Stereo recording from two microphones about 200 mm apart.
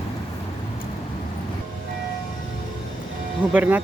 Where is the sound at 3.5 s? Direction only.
10° right (ahead or behind).